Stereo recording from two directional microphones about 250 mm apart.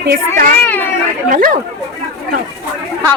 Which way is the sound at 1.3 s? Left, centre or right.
Right.